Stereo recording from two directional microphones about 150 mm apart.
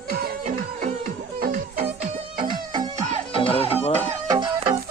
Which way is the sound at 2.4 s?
30° right (ahead or behind).